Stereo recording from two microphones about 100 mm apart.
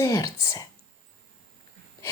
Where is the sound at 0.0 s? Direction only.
35° left (ahead or behind).